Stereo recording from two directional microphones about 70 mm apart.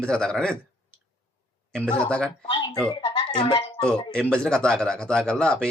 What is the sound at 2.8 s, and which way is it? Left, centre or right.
Speech, left.